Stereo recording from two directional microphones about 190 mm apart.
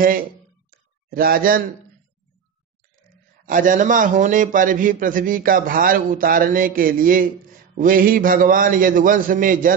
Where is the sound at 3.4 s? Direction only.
45° right (ahead or behind).